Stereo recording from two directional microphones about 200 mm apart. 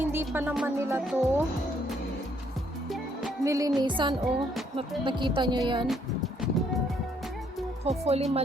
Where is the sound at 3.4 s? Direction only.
15° right (ahead or behind).